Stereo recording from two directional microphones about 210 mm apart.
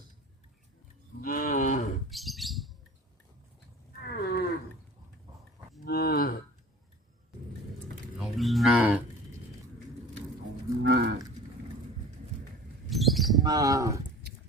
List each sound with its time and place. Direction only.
1.2 s cattle: 45° left (ahead or behind)
2.0 s bird: centre (ahead or behind)
4.0 s cattle: 50° left (ahead or behind)
5.8 s a sound: 45° left (ahead or behind)
8.2 s livestock: centre (ahead or behind)
10.8 s cattle: 50° right (ahead or behind)
12.9 s bird: centre (ahead or behind)
13.4 s cricket: 20° right (ahead or behind)